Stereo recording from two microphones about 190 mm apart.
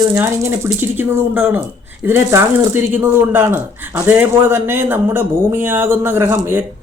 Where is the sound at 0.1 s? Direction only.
15° right (ahead or behind).